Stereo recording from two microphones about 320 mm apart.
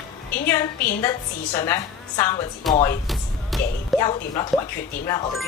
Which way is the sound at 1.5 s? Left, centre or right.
Centre.